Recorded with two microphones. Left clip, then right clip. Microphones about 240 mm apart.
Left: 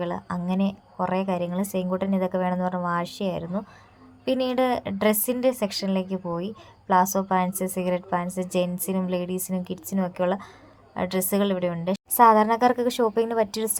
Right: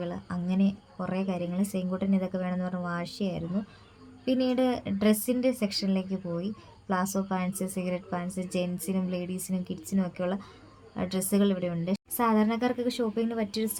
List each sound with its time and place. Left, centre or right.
0.0 s speech: centre